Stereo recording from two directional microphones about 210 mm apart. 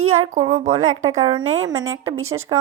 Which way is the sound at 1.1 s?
20° right (ahead or behind).